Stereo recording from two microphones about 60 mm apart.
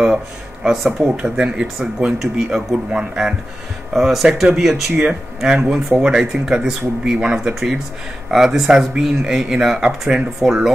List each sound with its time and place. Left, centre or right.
0.7 s speech: centre